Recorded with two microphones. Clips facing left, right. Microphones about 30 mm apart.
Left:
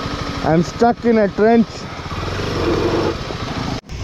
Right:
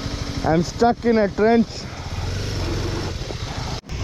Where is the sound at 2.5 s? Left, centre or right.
Left.